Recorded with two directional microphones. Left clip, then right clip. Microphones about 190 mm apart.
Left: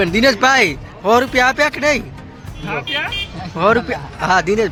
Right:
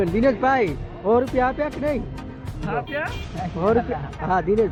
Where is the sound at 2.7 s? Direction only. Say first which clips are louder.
Left 5 dB; 25° left (ahead or behind).